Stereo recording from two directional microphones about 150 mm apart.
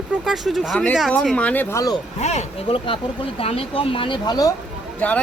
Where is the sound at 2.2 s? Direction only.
50° left (ahead or behind); by 4.5 s 25° left (ahead or behind).